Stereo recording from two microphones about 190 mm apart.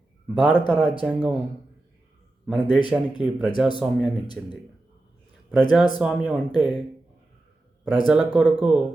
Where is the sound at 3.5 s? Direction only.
25° left (ahead or behind).